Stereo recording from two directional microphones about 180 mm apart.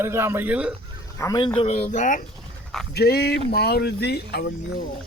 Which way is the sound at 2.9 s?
60° left (ahead or behind).